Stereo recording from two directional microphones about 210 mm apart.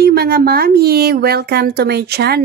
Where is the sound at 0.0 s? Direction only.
50° right (ahead or behind).